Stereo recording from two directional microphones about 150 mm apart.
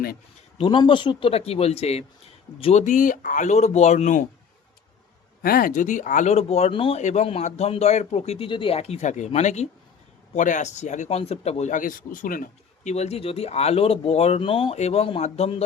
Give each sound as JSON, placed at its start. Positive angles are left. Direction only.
{"t": 0.6, "sound": "speech", "side_deg": 30}
{"t": 2.8, "sound": "speech", "side_deg": 55}
{"t": 5.4, "sound": "speech", "side_deg": 75}
{"t": 7.0, "sound": "speech", "side_deg": 50}